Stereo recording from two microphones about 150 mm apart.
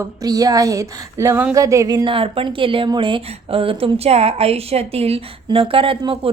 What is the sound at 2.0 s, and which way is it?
A woman's voice, 35° right (ahead or behind).